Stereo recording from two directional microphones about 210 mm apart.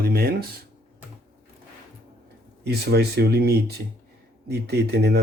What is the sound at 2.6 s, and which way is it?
Speech, 50° right (ahead or behind).